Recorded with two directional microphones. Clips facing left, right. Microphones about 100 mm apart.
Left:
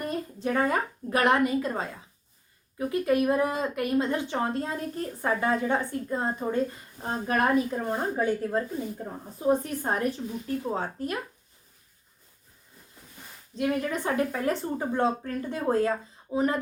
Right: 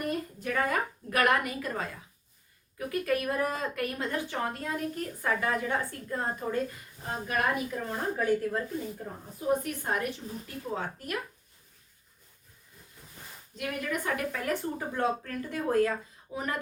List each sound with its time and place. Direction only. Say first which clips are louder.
0.0 s a woman's voice: left 2 dB; 25° left (ahead or behind)
7.0 s a woman's voice: left 4 dB; 35° left (ahead or behind)
13.6 s speech: left 6 dB; 25° left (ahead or behind)